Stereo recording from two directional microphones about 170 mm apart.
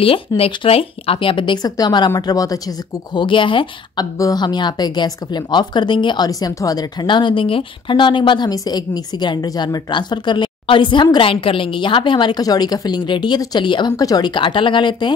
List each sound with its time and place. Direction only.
0.0 s a woman's voice: 30° left (ahead or behind)